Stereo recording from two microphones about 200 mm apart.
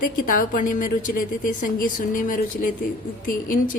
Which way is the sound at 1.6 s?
40° left (ahead or behind).